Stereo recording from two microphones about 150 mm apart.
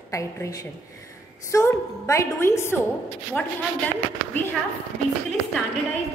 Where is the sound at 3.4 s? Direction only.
5° left (ahead or behind).